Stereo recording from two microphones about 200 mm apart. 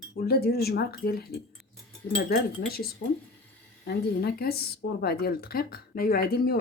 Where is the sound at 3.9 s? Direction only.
50° left (ahead or behind).